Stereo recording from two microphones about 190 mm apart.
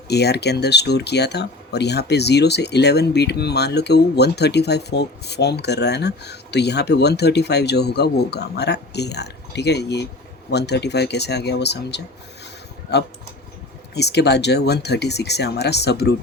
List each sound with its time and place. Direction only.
0.1 s speech: 60° left (ahead or behind)
13.9 s speech: 60° left (ahead or behind)